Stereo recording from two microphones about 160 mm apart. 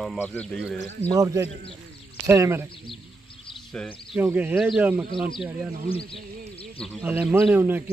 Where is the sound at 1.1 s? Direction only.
20° right (ahead or behind).